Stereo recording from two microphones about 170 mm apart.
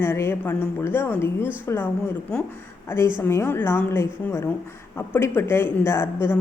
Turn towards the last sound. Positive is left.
turn(degrees=15)  # may be behind; listen again after turning